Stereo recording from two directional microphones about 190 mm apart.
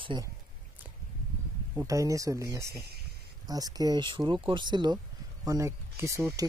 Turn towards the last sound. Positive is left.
turn(degrees=-15)  # may be behind; listen again after turning